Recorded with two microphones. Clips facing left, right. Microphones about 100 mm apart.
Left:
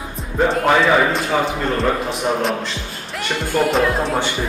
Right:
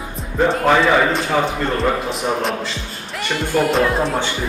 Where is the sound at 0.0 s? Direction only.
Centre (ahead or behind).